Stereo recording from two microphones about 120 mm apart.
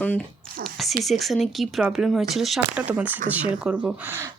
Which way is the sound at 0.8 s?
Centre (ahead or behind).